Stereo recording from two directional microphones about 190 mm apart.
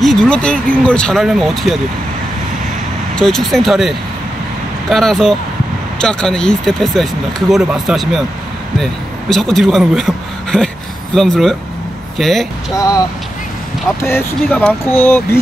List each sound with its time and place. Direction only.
0.0 s speech: 5° left (ahead or behind)
3.2 s speech: centre (ahead or behind)
9.3 s speech: centre (ahead or behind)
12.7 s speech: 20° left (ahead or behind)
14.0 s speech: 10° left (ahead or behind)